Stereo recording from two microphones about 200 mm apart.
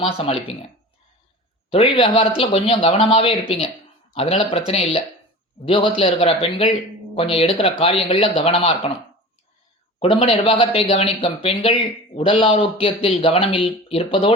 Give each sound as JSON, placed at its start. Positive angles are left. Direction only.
{"t": 0.0, "sound": "speech", "side_deg": 25}
{"t": 1.7, "sound": "speech", "side_deg": 25}
{"t": 10.0, "sound": "speech", "side_deg": 25}